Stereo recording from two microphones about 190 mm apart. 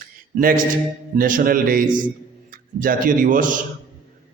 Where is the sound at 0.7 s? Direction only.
45° right (ahead or behind).